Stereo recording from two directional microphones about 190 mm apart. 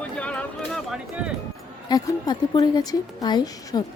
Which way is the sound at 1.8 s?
20° left (ahead or behind).